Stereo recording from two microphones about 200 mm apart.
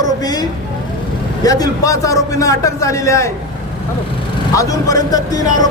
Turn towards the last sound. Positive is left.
turn(degrees=20)  # may be behind; listen again after turning